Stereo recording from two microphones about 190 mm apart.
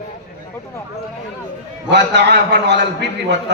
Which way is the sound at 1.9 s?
65° right (ahead or behind).